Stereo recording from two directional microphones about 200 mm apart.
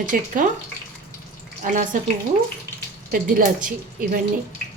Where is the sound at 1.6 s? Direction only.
40° right (ahead or behind).